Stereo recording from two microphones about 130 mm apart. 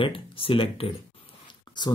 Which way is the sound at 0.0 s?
45° left (ahead or behind).